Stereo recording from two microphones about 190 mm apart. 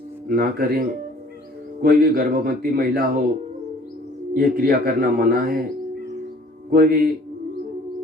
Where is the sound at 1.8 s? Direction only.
50° right (ahead or behind).